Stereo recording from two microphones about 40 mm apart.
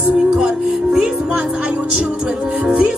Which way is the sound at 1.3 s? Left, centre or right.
Right.